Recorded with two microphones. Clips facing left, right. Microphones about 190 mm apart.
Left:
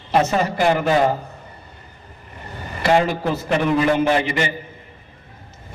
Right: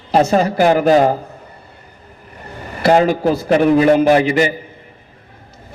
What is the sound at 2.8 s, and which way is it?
A man's voice, 40° right (ahead or behind).